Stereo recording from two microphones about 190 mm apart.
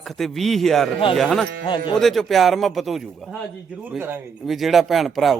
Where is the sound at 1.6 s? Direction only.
25° left (ahead or behind).